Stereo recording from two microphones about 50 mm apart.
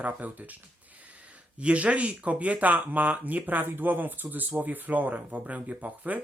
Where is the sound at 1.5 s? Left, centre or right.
Right.